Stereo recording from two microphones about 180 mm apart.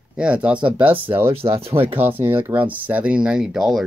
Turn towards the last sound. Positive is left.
turn(degrees=0)  # may be behind; listen again after turning